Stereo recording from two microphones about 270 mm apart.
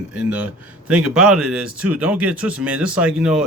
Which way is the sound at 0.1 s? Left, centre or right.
Centre.